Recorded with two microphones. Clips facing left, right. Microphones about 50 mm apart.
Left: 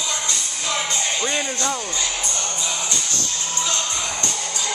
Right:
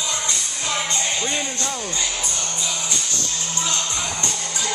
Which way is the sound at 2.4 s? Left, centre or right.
Centre.